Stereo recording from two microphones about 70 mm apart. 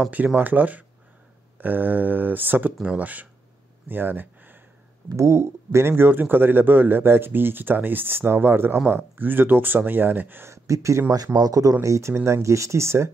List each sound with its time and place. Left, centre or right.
0.4 s speech: right
5.1 s speech: right
10.5 s speech: right
11.3 s speech: right
11.7 s speech: right